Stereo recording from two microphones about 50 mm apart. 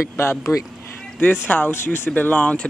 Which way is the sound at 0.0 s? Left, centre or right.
Left.